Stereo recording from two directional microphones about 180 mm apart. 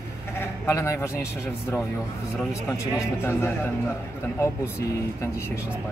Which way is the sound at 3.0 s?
10° left (ahead or behind).